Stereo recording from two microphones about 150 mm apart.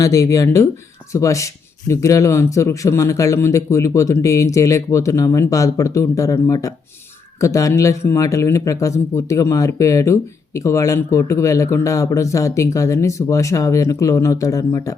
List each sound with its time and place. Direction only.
0.0 s speech: 20° left (ahead or behind)